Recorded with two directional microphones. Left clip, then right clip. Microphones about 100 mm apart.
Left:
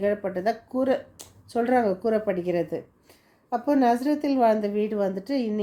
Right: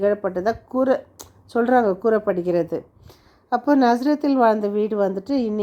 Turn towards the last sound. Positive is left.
turn(degrees=-40)  # may be behind; listen again after turning